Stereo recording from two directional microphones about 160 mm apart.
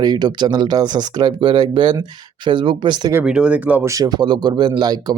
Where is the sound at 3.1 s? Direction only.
10° right (ahead or behind).